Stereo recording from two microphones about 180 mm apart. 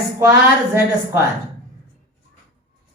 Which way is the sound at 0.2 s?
15° right (ahead or behind).